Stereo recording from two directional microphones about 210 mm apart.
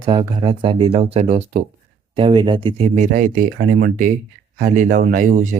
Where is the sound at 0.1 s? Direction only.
20° right (ahead or behind).